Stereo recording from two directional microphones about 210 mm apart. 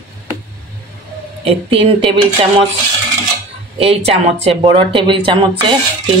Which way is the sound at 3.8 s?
30° right (ahead or behind).